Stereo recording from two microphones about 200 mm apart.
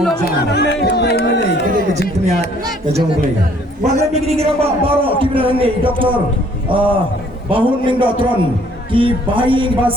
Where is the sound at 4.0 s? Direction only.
30° right (ahead or behind).